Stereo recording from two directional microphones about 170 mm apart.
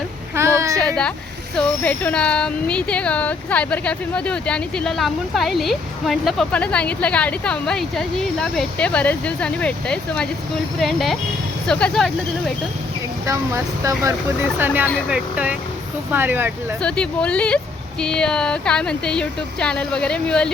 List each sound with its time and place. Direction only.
0.3 s a sound: 15° right (ahead or behind)
0.8 s speech: 5° left (ahead or behind)
13.2 s speech: 20° right (ahead or behind)
16.8 s speech: 5° left (ahead or behind)